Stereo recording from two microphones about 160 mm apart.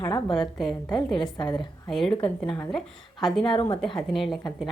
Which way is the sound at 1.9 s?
5° left (ahead or behind).